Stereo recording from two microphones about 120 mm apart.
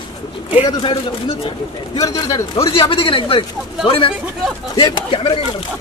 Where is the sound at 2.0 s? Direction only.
30° left (ahead or behind).